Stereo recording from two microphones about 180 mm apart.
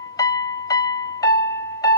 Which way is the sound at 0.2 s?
20° left (ahead or behind).